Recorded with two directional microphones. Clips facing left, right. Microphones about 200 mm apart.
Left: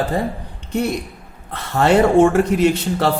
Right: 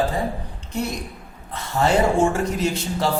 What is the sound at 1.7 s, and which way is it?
A man's voice, 65° left (ahead or behind).